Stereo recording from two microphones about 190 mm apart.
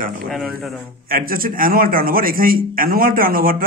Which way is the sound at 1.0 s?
50° right (ahead or behind).